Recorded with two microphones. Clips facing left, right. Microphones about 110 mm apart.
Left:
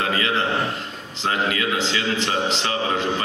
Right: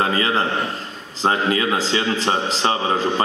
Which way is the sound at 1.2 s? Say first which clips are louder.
Right 4 dB; 35° right (ahead or behind).